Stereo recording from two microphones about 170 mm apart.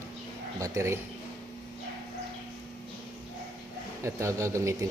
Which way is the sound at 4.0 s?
15° right (ahead or behind).